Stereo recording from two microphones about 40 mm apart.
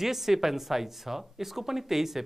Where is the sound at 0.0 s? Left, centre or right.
Centre.